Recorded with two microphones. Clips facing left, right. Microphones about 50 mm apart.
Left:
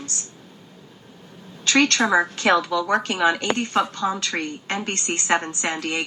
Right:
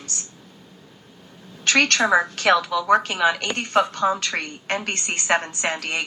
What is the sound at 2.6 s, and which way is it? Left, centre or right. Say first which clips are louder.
Speech: right 3 dB; centre.